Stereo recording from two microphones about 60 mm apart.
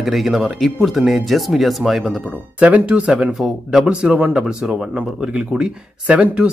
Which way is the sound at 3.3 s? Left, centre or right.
Centre.